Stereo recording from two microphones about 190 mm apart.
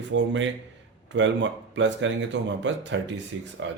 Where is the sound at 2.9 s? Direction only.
90° right.